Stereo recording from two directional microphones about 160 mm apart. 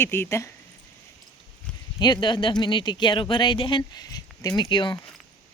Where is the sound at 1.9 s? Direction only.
30° left (ahead or behind).